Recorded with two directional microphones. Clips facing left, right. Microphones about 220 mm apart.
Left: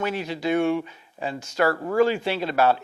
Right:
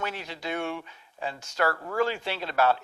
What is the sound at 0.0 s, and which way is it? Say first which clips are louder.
Speech: left 8 dB; 10° left (ahead or behind).